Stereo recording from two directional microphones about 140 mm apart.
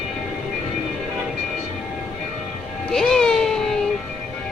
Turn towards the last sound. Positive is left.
turn(degrees=5)  # may be behind; listen again after turning